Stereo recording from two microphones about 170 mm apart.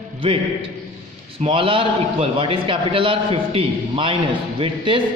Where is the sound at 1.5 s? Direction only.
30° right (ahead or behind).